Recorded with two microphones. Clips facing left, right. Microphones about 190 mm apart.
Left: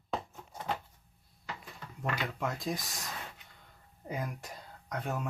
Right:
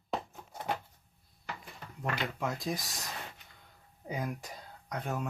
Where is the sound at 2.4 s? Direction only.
Centre (ahead or behind).